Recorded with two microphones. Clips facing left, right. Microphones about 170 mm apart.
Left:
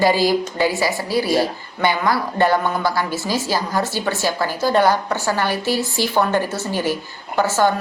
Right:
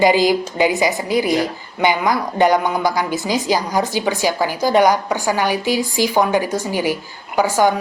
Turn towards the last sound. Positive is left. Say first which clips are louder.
# right 2 dB
turn(degrees=-15)  # may be behind; listen again after turning